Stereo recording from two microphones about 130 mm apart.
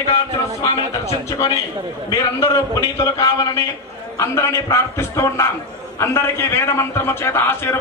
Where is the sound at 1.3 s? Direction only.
35° left (ahead or behind).